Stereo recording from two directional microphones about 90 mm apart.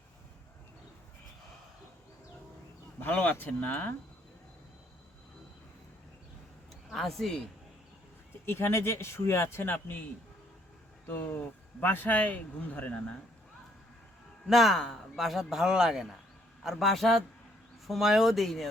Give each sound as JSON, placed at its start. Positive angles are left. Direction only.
{"t": 3.0, "sound": "a man's voice", "side_deg": 20}
{"t": 6.9, "sound": "speech", "side_deg": 0}
{"t": 8.4, "sound": "a man's voice", "side_deg": 25}
{"t": 11.1, "sound": "speech", "side_deg": 25}
{"t": 14.4, "sound": "speech", "side_deg": -5}